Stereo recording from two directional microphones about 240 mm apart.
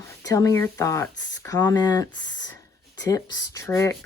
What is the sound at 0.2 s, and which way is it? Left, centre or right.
Speech, centre.